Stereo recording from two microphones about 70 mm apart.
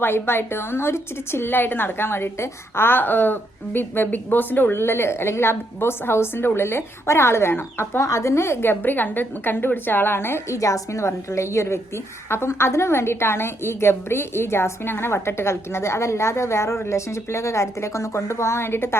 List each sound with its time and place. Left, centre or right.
0.0 s a woman's voice: left
10.5 s a woman's voice: left